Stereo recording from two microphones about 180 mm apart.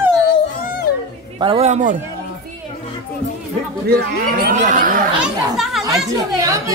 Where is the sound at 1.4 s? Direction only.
30° right (ahead or behind).